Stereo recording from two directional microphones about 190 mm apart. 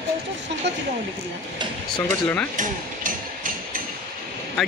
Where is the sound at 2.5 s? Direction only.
45° right (ahead or behind).